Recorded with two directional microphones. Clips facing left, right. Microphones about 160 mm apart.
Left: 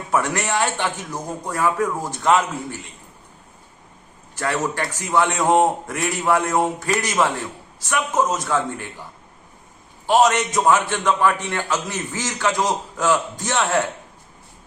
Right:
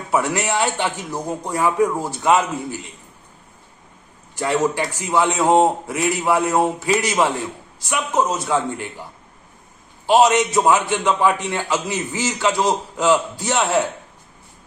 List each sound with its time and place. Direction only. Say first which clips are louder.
0.1 s a man's voice: right 1 dB; 10° right (ahead or behind)
4.4 s a man's voice: right 4 dB; 15° right (ahead or behind)
10.1 s a man's voice: right 2 dB; 10° right (ahead or behind)